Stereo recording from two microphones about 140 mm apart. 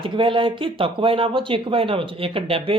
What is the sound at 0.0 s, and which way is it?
Speech, 35° right (ahead or behind).